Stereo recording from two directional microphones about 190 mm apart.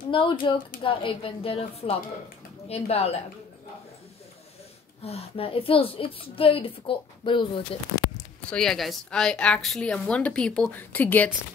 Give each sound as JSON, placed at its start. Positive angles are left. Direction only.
{"t": 0.1, "sound": "a woman's voice", "side_deg": 25}
{"t": 5.0, "sound": "a woman's voice", "side_deg": 30}
{"t": 8.5, "sound": "a woman's voice", "side_deg": 0}